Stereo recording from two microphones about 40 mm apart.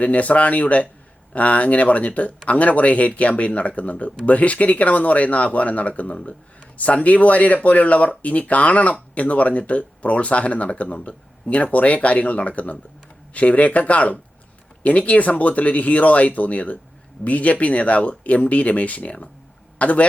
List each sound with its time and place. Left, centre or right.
0.0 s speech: left